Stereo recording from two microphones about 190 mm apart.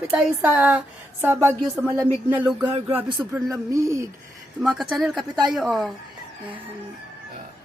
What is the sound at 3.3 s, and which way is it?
Speech, 15° right (ahead or behind).